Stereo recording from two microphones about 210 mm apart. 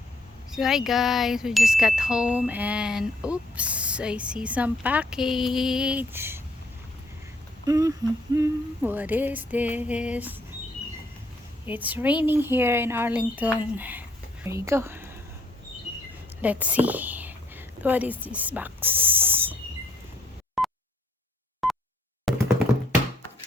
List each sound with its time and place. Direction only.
0.5 s speech: centre (ahead or behind)
7.7 s speech: 15° right (ahead or behind)
11.6 s a woman's voice: 10° right (ahead or behind)
16.4 s speech: 5° right (ahead or behind)
20.6 s a sound: centre (ahead or behind)
22.3 s tap: centre (ahead or behind)